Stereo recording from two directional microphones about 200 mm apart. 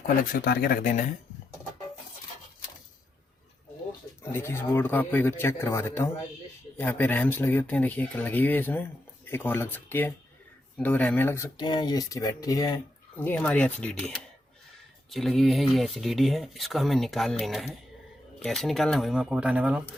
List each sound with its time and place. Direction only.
0.3 s speech: 50° left (ahead or behind)
4.2 s speech: 10° left (ahead or behind)
15.1 s speech: centre (ahead or behind)